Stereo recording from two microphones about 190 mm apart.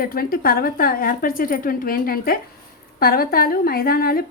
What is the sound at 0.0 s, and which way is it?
A woman's voice, 50° left (ahead or behind).